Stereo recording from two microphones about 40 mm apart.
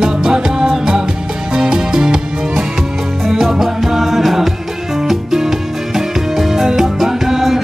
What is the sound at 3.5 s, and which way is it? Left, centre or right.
Music, centre.